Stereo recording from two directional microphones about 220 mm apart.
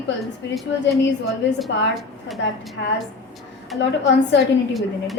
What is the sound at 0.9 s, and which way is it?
A woman's voice, centre (ahead or behind).